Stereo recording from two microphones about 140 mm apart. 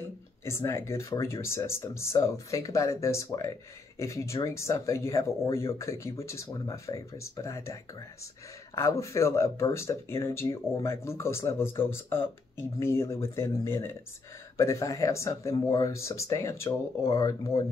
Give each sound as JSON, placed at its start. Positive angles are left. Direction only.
{"t": 0.5, "sound": "speech", "side_deg": 20}